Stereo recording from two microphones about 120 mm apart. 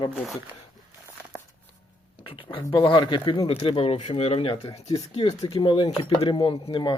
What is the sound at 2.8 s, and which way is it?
Speech, 40° left (ahead or behind).